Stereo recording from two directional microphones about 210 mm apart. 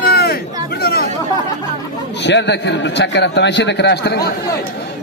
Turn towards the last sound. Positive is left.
turn(degrees=50)  # may be behind; listen again after turning